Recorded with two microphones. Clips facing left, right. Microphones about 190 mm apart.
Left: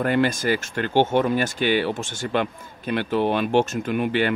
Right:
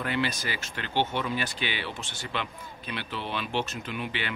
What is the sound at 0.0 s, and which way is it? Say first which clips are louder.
Speech: left 9 dB; 50° left (ahead or behind).